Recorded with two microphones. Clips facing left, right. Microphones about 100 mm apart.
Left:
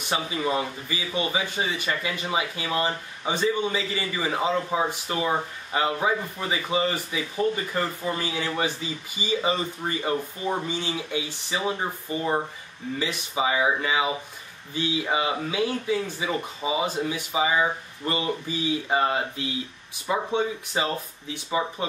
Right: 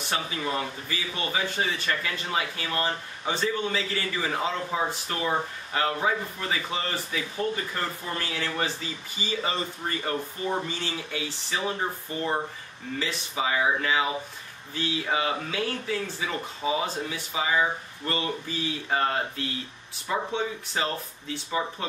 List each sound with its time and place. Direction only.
0.1 s speech: 15° left (ahead or behind)